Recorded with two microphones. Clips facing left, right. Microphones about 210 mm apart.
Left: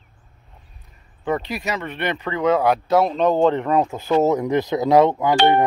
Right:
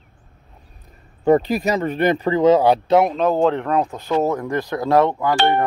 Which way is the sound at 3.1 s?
5° right (ahead or behind).